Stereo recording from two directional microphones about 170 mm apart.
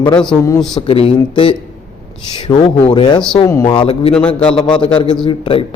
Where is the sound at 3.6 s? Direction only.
30° left (ahead or behind).